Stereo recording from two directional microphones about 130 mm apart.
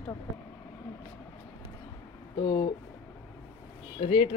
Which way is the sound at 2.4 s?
45° left (ahead or behind).